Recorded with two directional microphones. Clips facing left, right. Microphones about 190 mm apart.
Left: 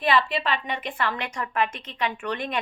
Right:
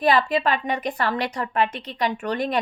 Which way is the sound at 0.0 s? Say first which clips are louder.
Right 4 dB; 40° right (ahead or behind).